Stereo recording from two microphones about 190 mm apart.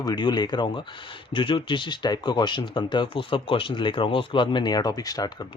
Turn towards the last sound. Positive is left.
turn(degrees=20)  # may be behind; listen again after turning